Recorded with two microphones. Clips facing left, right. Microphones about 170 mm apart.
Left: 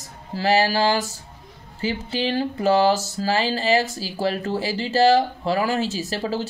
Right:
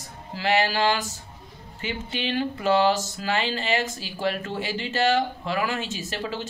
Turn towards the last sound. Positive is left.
turn(degrees=35)  # may be behind; listen again after turning